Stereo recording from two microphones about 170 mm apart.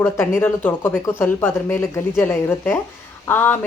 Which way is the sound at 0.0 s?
15° left (ahead or behind).